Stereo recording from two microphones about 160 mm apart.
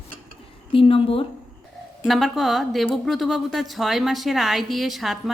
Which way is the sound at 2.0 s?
Centre (ahead or behind).